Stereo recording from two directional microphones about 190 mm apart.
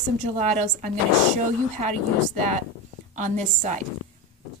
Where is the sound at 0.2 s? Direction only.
40° right (ahead or behind).